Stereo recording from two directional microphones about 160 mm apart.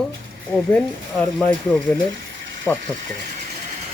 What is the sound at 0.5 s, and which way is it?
Speech, 5° left (ahead or behind).